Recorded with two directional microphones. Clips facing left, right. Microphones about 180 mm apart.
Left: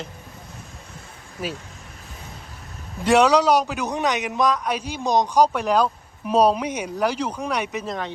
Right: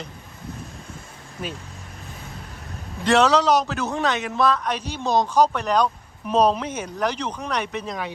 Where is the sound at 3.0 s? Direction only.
10° left (ahead or behind).